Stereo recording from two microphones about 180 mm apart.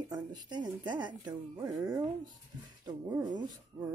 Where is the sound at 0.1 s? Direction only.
20° right (ahead or behind).